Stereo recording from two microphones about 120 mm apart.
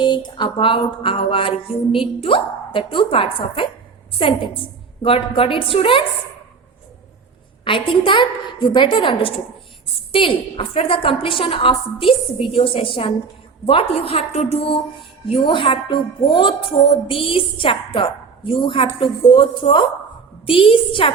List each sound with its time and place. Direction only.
0.0 s speech: 40° left (ahead or behind)
7.6 s speech: 45° left (ahead or behind)